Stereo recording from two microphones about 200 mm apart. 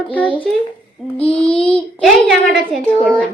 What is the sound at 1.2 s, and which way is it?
Child singing, 30° left (ahead or behind).